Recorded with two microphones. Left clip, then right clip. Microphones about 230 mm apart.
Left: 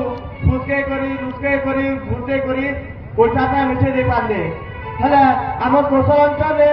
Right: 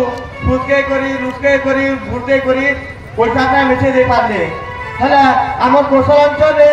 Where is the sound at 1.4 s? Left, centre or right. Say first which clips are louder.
Right 6 dB; right.